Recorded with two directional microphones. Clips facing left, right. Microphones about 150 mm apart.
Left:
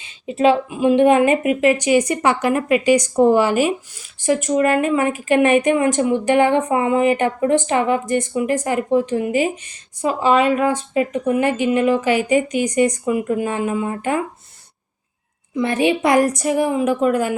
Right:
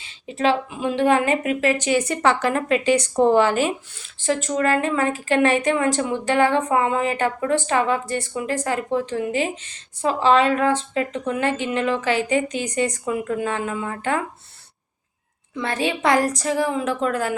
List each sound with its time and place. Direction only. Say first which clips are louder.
0.0 s speech: left 5 dB; 15° left (ahead or behind)
15.6 s speech: left 5 dB; 20° left (ahead or behind)